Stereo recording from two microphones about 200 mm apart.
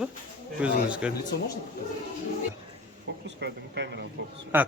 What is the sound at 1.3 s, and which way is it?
Speech, 60° left (ahead or behind).